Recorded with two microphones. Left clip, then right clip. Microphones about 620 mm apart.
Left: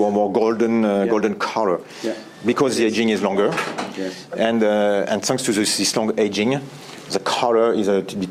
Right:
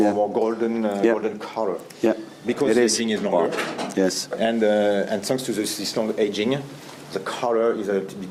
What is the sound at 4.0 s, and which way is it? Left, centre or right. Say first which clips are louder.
Speech: right 11 dB; right.